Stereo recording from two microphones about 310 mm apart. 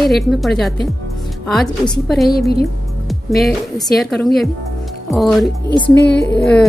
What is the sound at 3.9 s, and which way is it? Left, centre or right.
Speech, centre.